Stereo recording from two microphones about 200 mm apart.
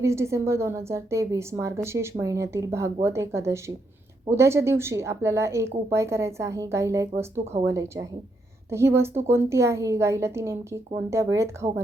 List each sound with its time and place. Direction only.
0.0 s a woman's voice: 15° right (ahead or behind)